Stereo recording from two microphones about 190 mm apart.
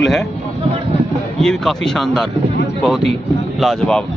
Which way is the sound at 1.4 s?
5° left (ahead or behind).